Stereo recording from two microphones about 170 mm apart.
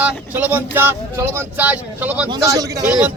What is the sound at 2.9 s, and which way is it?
Speech, 5° right (ahead or behind).